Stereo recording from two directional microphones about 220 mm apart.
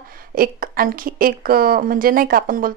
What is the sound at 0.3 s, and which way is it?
A woman's voice, 40° right (ahead or behind).